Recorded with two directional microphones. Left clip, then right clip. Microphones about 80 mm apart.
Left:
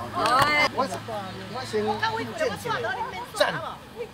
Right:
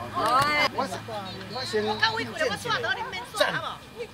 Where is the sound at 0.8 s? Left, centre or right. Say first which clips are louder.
Left 2 dB; right.